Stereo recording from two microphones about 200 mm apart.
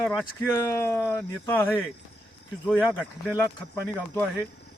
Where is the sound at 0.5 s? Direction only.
15° left (ahead or behind).